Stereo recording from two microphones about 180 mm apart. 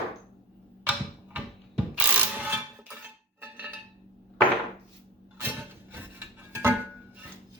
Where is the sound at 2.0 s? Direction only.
5° right (ahead or behind).